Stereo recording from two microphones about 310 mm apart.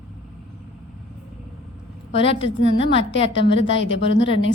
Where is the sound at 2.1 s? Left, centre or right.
Left.